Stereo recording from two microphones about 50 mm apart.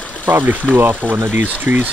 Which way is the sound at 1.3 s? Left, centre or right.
Right.